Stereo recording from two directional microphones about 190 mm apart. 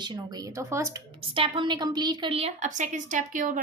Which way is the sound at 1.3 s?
25° right (ahead or behind).